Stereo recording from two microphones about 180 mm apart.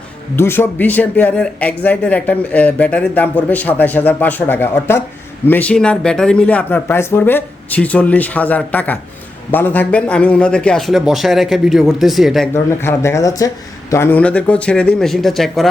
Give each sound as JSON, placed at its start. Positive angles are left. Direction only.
{"t": 0.3, "sound": "a man's voice", "side_deg": 15}
{"t": 12.8, "sound": "a man's voice", "side_deg": 15}